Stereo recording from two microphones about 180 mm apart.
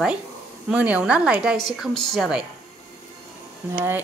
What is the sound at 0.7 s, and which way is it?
A woman's voice, 5° right (ahead or behind).